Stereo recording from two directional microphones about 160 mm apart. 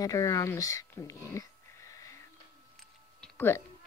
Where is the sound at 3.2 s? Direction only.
15° left (ahead or behind).